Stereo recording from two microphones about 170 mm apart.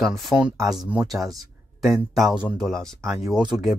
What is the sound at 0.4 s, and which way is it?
Speech, 5° right (ahead or behind).